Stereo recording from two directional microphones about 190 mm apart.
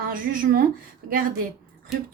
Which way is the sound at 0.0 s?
50° right (ahead or behind).